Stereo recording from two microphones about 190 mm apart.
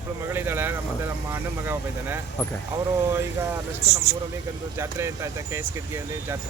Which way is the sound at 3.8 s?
35° right (ahead or behind).